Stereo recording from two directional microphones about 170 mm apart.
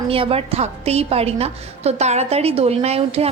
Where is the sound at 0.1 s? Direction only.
35° right (ahead or behind).